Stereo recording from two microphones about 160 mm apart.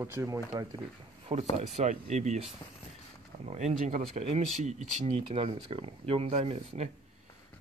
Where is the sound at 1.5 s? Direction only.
45° right (ahead or behind).